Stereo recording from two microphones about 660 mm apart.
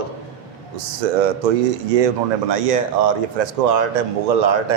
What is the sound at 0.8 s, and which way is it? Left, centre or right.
A man's voice, right.